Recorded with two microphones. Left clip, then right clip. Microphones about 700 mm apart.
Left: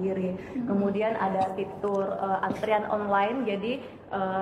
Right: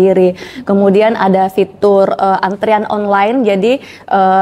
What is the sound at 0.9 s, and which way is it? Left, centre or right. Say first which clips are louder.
A woman's voice: right 17 dB; right.